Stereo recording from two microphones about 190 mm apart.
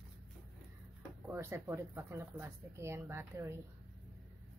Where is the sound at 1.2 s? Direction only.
10° right (ahead or behind).